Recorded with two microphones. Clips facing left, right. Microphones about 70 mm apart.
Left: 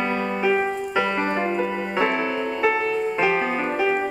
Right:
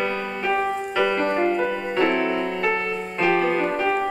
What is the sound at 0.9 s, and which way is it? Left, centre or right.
Music, centre.